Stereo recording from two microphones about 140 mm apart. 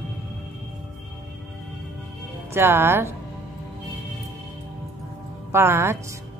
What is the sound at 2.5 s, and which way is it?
Speech, 15° right (ahead or behind).